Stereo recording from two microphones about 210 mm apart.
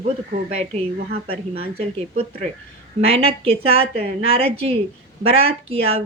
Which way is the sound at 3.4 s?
30° right (ahead or behind).